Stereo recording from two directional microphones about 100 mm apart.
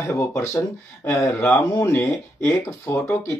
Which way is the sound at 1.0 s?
25° left (ahead or behind).